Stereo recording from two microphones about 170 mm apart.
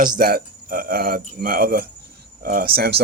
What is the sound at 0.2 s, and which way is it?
Speech, 60° right (ahead or behind).